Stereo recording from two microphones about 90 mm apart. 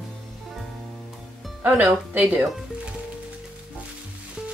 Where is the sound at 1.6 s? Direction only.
20° right (ahead or behind).